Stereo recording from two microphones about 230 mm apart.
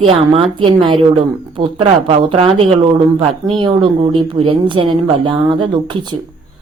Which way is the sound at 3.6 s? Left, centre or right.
Right.